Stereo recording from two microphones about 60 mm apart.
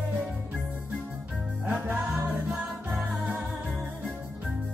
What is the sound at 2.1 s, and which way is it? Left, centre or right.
Music, centre.